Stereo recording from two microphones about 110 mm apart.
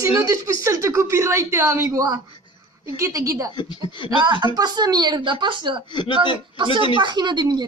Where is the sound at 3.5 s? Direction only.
45° left (ahead or behind).